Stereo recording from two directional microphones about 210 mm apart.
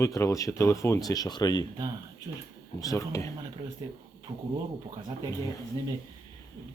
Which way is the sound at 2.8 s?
15° left (ahead or behind).